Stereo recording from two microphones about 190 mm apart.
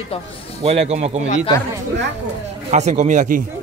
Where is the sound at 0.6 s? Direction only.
35° right (ahead or behind).